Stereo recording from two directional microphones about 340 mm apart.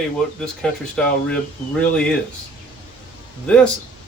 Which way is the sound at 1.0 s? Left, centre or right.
Centre.